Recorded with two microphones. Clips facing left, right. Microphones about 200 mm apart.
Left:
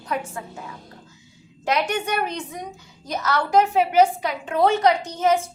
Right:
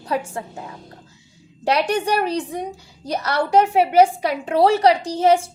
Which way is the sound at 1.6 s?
35° right (ahead or behind).